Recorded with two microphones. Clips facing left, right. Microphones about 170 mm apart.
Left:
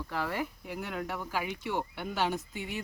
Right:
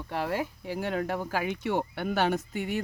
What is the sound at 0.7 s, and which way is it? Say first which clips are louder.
Speech: right 6 dB; 85° right.